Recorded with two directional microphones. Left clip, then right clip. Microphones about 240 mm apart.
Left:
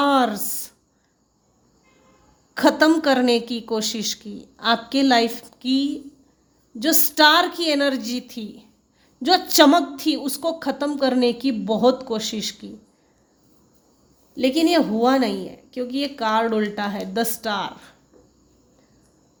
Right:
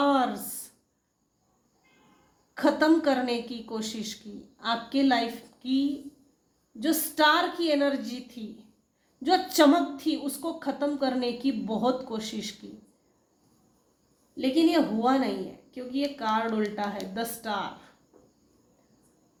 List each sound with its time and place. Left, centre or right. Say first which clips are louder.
0.0 s a sound: left 6 dB; left
2.6 s a woman's voice: left 6 dB; left
14.3 s a woman's voice: left 5 dB; left